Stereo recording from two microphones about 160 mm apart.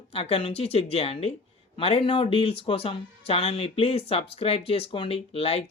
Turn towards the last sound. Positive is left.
turn(degrees=40)  # may be behind; listen again after turning